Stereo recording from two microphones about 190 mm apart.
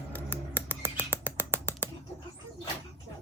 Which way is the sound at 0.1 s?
10° left (ahead or behind).